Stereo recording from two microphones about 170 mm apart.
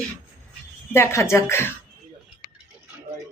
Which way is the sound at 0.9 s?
15° left (ahead or behind).